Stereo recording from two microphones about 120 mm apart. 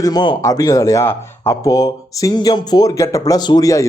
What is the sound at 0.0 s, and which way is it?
Speech, 35° left (ahead or behind).